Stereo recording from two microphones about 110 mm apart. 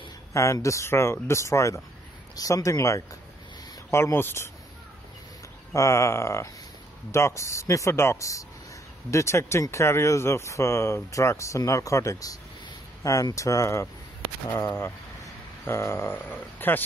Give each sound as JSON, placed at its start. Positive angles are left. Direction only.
{"t": 0.3, "sound": "speech", "side_deg": 30}
{"t": 5.7, "sound": "speech", "side_deg": 25}